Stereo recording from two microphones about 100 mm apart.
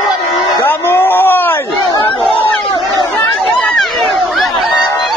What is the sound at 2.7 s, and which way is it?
Chatter, 45° left (ahead or behind).